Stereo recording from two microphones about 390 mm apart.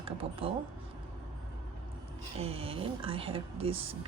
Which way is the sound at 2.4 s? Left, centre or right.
Centre.